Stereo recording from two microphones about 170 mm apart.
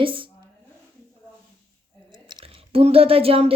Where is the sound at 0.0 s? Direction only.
30° right (ahead or behind).